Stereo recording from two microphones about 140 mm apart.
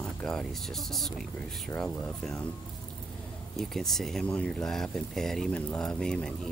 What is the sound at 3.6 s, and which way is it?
Speech, centre (ahead or behind).